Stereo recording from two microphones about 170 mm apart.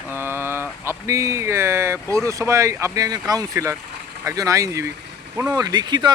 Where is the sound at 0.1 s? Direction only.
15° right (ahead or behind).